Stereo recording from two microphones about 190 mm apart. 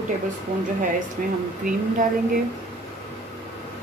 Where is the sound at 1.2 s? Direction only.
45° right (ahead or behind).